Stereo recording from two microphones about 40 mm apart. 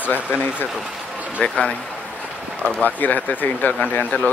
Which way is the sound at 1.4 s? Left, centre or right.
Left.